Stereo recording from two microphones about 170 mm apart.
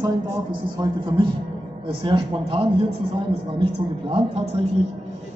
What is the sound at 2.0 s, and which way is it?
A woman's voice, 30° right (ahead or behind).